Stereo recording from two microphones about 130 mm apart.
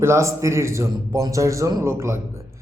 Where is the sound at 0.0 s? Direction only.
20° right (ahead or behind).